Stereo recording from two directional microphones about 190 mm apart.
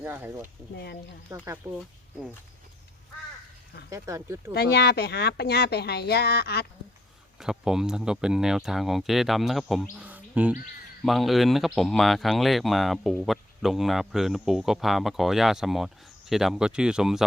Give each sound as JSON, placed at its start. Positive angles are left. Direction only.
{"t": 0.0, "sound": "speech", "side_deg": -10}
{"t": 3.8, "sound": "speech", "side_deg": -15}
{"t": 4.5, "sound": "speech", "side_deg": 55}
{"t": 7.3, "sound": "speech", "side_deg": -5}
{"t": 10.0, "sound": "bird", "side_deg": -10}
{"t": 11.0, "sound": "speech", "side_deg": 0}